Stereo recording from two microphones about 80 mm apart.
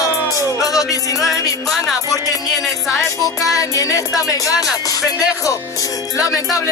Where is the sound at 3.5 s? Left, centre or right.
Left.